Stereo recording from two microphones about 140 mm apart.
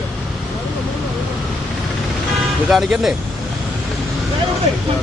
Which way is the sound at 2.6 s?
Centre (ahead or behind).